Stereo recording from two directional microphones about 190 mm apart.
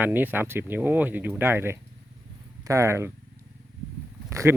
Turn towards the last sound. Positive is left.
turn(degrees=-15)  # may be behind; listen again after turning